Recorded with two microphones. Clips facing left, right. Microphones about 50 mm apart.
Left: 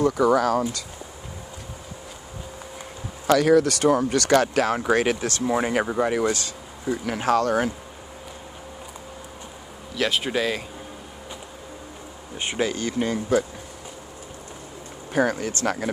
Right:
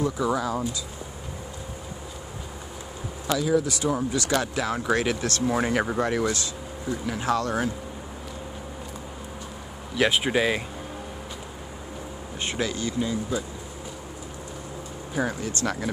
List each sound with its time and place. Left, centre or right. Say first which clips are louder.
0.0 s speech: left 6 dB; left
3.3 s speech: left 6 dB; left
4.7 s speech: even; left
5.5 s speech: left 2 dB; centre
7.1 s speech: left 5 dB; left
9.9 s speech: right 2 dB; centre
12.4 s speech: left 3 dB; left
12.7 s speech: left 2 dB; left
13.1 s speech: left 6 dB; left
15.1 s speech: left 5 dB; left